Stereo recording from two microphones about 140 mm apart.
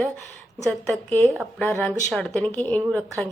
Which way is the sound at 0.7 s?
10° left (ahead or behind).